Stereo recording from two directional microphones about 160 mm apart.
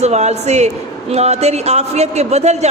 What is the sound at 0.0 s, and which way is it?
Speech, 45° right (ahead or behind).